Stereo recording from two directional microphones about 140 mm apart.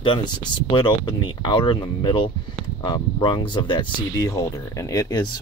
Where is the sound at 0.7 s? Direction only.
35° left (ahead or behind).